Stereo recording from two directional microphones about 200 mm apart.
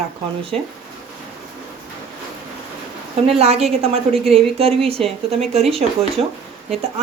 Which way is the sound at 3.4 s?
30° right (ahead or behind).